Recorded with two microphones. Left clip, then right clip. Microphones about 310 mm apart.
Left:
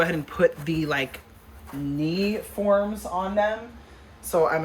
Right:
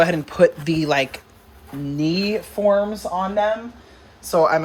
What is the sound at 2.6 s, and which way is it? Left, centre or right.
Speech, right.